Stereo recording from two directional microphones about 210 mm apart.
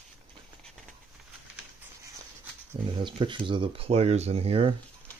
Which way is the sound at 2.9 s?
25° right (ahead or behind).